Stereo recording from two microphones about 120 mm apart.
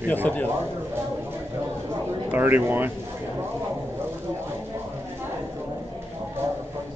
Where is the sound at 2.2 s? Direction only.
15° right (ahead or behind).